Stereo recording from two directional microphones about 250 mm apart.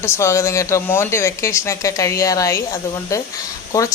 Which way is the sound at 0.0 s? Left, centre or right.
Centre.